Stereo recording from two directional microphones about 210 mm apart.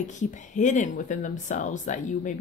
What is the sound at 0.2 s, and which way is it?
Speech, 35° left (ahead or behind).